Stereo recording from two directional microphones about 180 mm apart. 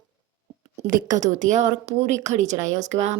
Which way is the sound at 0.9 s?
45° right (ahead or behind).